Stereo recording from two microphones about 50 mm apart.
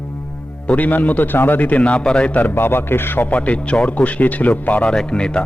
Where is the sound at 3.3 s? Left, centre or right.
Left.